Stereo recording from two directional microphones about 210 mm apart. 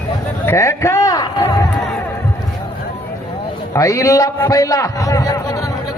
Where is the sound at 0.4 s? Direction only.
15° left (ahead or behind).